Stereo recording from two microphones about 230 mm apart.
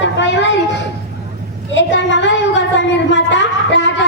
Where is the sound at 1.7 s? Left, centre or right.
Left.